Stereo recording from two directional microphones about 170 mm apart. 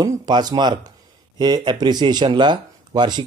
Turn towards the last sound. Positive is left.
turn(degrees=-25)  # may be behind; listen again after turning